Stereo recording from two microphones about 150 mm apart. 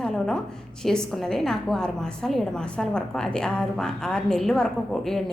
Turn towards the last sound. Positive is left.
turn(degrees=5)  # may be behind; listen again after turning